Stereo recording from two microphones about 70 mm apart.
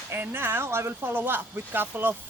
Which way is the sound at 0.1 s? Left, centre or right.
Right.